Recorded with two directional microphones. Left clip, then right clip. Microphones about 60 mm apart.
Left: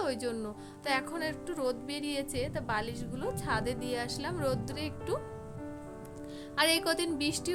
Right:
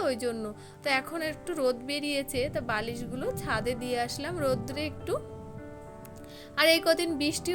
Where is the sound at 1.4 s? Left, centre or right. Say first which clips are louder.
Right 5 dB; right.